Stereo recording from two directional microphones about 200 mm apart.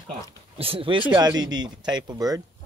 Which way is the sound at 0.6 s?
25° right (ahead or behind).